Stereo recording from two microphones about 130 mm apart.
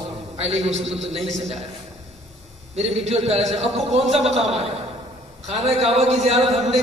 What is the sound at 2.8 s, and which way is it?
A man's voice, 55° right (ahead or behind).